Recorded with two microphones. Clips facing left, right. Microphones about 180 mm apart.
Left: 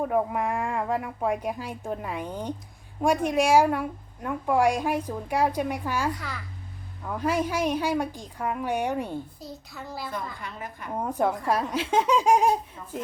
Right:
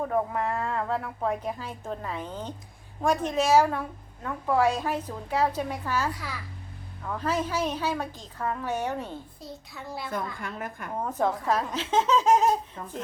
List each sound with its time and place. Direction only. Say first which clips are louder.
0.0 s a woman's voice: left 2 dB; 10° left (ahead or behind)
6.1 s a child's voice: left 1 dB; 5° right (ahead or behind)
7.0 s a woman's voice: left 2 dB; 10° left (ahead or behind)
9.4 s a child's voice: left 1 dB; centre (ahead or behind)
10.4 s a woman's voice: right 2 dB; 50° right (ahead or behind)
10.9 s a woman's voice: left 2 dB; 10° left (ahead or behind)